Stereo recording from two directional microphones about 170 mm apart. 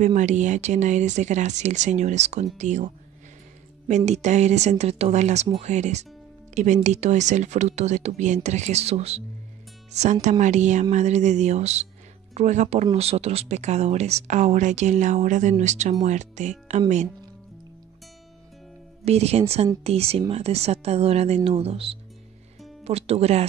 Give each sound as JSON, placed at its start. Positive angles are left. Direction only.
{"t": 0.0, "sound": "speech", "side_deg": -45}
{"t": 10.4, "sound": "speech", "side_deg": -45}
{"t": 19.0, "sound": "speech", "side_deg": -40}